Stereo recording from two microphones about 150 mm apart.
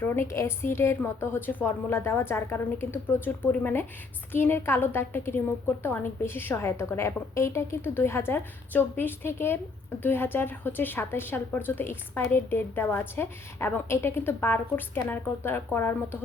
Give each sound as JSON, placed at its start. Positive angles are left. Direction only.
{"t": 0.0, "sound": "a woman's voice", "side_deg": 15}